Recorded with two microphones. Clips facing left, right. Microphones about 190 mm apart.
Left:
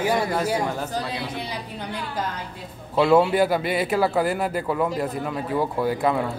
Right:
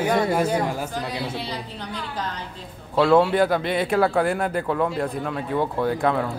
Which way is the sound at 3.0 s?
5° left (ahead or behind).